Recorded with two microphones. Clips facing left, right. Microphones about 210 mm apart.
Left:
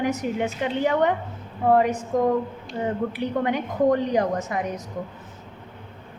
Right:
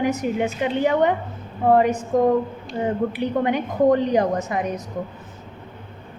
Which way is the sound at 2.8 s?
20° right (ahead or behind).